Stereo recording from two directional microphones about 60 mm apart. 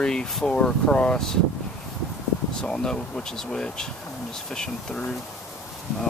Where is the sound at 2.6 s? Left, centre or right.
Centre.